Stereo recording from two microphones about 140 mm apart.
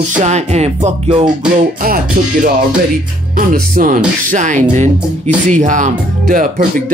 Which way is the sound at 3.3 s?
80° right.